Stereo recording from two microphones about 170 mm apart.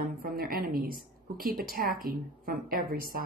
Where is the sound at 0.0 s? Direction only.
55° right (ahead or behind).